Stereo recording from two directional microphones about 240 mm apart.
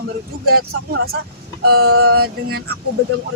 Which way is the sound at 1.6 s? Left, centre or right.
Right.